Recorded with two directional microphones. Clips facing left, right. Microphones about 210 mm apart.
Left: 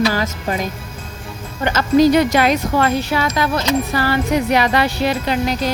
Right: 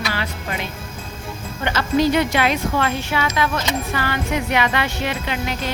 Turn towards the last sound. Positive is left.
turn(degrees=35)  # may be behind; listen again after turning